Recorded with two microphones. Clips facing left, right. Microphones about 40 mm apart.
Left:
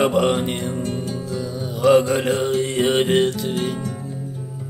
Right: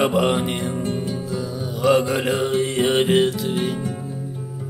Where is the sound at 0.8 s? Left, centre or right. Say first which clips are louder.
Right 1 dB; centre.